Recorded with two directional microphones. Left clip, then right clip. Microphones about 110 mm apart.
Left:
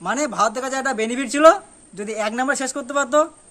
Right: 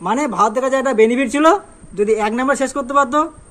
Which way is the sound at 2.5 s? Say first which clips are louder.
Right 7 dB; 50° left (ahead or behind).